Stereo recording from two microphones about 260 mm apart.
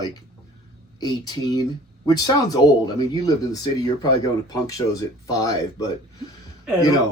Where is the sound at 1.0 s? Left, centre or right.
Centre.